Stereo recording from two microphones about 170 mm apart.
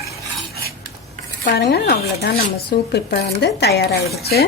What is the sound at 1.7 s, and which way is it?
A woman's voice, 70° left (ahead or behind).